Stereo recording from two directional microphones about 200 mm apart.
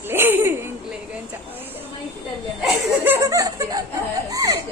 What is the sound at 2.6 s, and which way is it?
A woman's voice, 5° right (ahead or behind).